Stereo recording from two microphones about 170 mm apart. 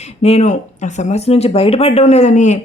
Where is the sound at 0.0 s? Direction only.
40° left (ahead or behind).